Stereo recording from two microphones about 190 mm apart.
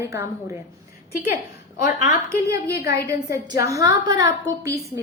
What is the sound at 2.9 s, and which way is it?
A woman's voice, 15° right (ahead or behind).